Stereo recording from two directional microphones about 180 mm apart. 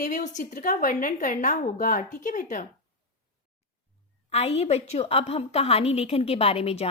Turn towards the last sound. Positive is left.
turn(degrees=35)  # may be behind; listen again after turning